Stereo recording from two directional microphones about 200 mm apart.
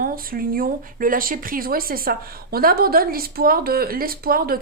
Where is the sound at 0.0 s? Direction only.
45° right (ahead or behind).